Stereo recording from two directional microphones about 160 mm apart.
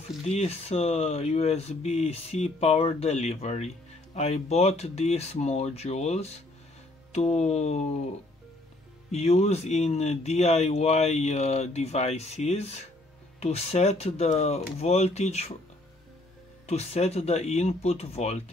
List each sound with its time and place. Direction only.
0.3 s speech: 40° left (ahead or behind)
9.1 s speech: 40° left (ahead or behind)
16.6 s speech: 45° left (ahead or behind)